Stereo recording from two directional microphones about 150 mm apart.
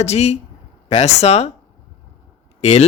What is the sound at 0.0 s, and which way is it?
Speech, 45° left (ahead or behind).